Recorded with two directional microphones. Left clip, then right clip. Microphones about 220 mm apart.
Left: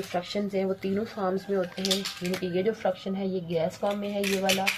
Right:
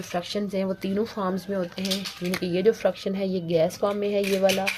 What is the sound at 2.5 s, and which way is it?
A woman's voice, 50° right (ahead or behind).